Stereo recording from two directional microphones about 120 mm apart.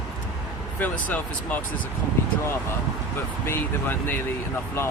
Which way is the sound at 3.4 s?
20° left (ahead or behind).